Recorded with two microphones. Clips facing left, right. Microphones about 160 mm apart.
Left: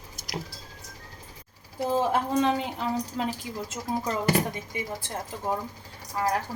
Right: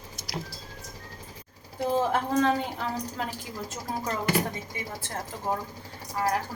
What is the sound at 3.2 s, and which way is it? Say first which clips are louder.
Speech: left 4 dB; 15° left (ahead or behind).